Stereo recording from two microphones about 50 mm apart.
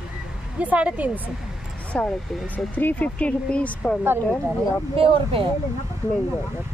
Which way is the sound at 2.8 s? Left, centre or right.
Left.